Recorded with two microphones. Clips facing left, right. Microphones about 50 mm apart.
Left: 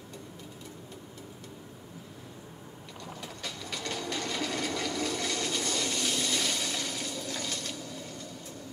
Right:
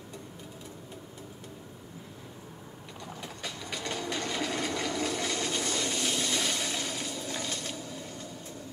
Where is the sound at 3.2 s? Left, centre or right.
Centre.